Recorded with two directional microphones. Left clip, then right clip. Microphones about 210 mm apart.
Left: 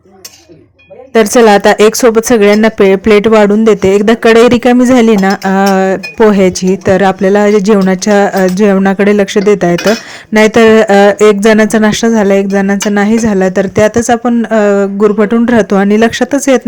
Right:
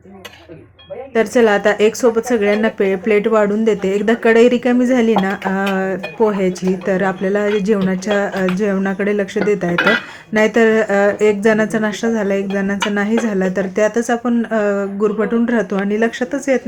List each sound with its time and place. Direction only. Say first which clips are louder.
1.1 s speech: left 8 dB; 45° left (ahead or behind)